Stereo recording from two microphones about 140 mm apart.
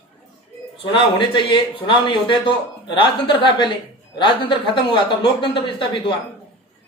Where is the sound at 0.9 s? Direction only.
35° left (ahead or behind).